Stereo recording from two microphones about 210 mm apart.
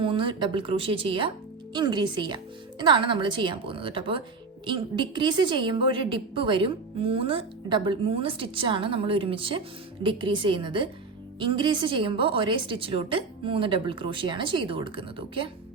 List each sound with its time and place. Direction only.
0.0 s a woman's voice: 25° right (ahead or behind)